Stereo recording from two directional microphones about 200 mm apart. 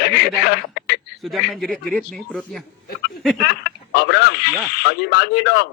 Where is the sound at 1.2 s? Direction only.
Centre (ahead or behind).